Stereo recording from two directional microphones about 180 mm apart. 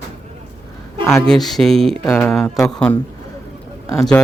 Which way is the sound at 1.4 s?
Centre (ahead or behind).